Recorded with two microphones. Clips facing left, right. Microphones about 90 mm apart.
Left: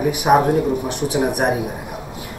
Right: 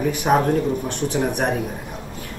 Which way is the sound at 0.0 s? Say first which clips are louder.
Left 3 dB; 10° left (ahead or behind).